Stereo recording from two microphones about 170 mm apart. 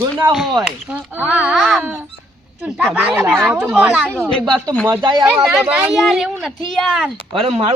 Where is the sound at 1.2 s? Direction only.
5° right (ahead or behind).